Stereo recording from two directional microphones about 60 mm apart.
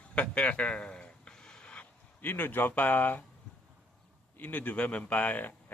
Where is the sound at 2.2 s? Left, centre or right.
Left.